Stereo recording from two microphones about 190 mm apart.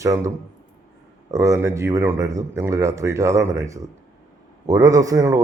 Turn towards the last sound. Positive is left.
turn(degrees=-15)  # may be behind; listen again after turning